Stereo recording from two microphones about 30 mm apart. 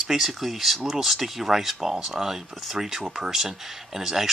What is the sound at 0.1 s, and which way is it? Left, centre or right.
Speech, centre.